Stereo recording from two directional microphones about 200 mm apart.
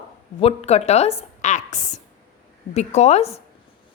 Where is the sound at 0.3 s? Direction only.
30° left (ahead or behind).